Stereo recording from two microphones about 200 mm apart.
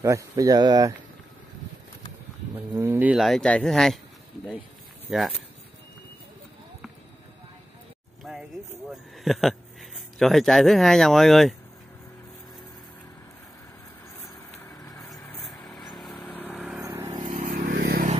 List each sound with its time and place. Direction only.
0.0 s speech: 15° right (ahead or behind)
2.5 s speech: 15° right (ahead or behind)
5.1 s speech: centre (ahead or behind)
8.2 s a sound: centre (ahead or behind)
8.9 s speech: centre (ahead or behind)
14.7 s vehicle: 15° left (ahead or behind)
15.0 s vehicle: 5° left (ahead or behind)
16.8 s vehicle: 15° right (ahead or behind)
17.3 s vehicle: 45° right (ahead or behind)